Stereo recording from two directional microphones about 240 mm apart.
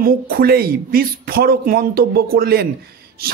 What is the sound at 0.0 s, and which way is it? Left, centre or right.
A man's voice, right.